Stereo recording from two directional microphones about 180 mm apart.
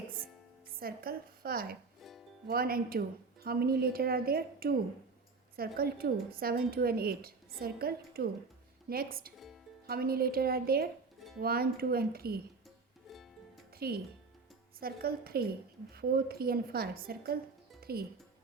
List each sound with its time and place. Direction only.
0.8 s a woman's voice: 55° right (ahead or behind)
2.0 s music: centre (ahead or behind)
2.5 s a woman's voice: 55° right (ahead or behind)
13.7 s a woman's voice: 60° right (ahead or behind)
17.7 s music: 60° right (ahead or behind)